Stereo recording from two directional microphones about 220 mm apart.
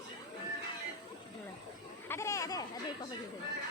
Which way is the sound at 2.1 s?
15° left (ahead or behind).